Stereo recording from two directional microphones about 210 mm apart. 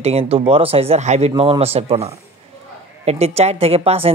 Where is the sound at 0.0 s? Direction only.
30° right (ahead or behind).